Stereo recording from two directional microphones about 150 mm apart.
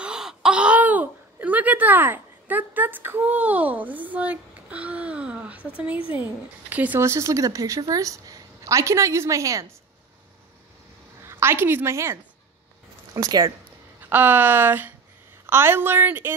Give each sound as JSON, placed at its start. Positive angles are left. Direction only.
{"t": 0.0, "sound": "a sound", "side_deg": -5}
{"t": 6.0, "sound": "speech", "side_deg": -10}
{"t": 11.2, "sound": "a woman's voice", "side_deg": -15}
{"t": 14.0, "sound": "speech", "side_deg": -10}